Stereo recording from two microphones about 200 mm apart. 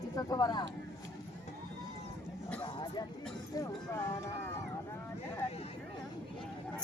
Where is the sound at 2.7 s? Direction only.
20° left (ahead or behind).